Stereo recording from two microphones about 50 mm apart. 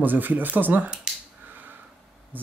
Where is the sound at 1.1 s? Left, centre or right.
Centre.